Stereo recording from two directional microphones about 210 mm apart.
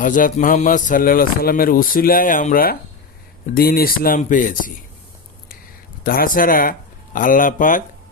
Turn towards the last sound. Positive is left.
turn(degrees=40)  # may be behind; listen again after turning